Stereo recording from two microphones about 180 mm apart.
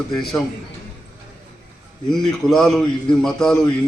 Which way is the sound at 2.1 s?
Centre (ahead or behind).